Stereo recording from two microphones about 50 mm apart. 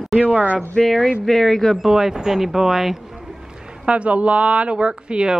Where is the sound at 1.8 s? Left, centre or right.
Centre.